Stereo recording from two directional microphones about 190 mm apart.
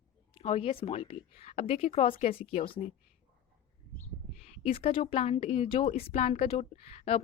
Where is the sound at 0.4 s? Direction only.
30° left (ahead or behind).